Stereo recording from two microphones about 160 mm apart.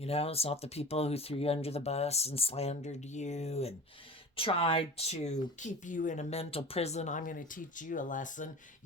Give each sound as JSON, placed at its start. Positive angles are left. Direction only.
{"t": 0.0, "sound": "speech", "side_deg": 40}